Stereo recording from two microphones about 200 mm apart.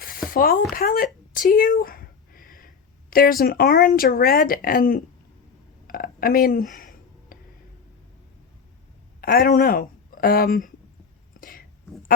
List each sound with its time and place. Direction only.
0.0 s speech: 45° left (ahead or behind)
5.9 s a sound: 45° left (ahead or behind)
9.2 s a woman's voice: 45° left (ahead or behind)
11.3 s whispering: 45° left (ahead or behind)